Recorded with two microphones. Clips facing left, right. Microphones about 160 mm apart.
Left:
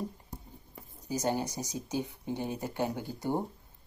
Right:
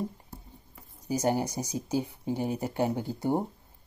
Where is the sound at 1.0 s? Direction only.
15° right (ahead or behind).